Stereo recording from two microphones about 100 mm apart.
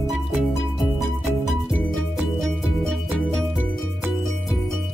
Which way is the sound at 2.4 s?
5° left (ahead or behind).